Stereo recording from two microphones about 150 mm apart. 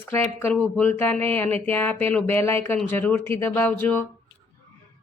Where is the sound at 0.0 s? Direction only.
15° left (ahead or behind).